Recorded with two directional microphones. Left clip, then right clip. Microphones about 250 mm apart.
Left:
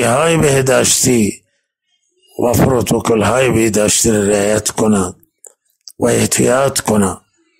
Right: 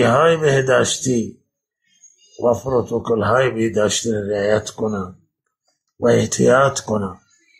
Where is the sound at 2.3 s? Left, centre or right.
Left.